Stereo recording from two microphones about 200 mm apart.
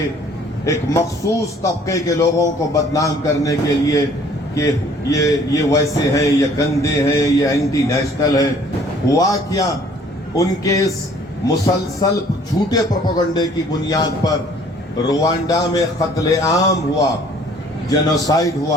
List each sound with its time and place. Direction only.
0.6 s a man's voice: 15° left (ahead or behind)
5.1 s a man's voice: 15° left (ahead or behind)
18.3 s a man's voice: 15° left (ahead or behind)